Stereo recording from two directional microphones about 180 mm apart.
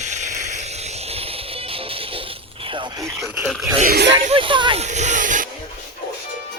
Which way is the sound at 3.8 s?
60° right (ahead or behind).